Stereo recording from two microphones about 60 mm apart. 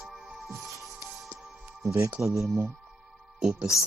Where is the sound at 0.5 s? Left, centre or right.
Right.